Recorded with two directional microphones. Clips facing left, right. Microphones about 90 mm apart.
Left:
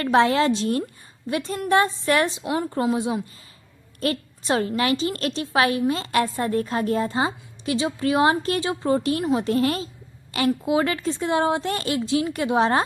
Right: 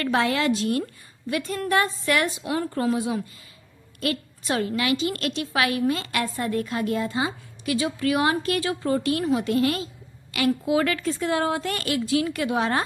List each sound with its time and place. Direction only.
0.0 s a woman's voice: 30° left (ahead or behind)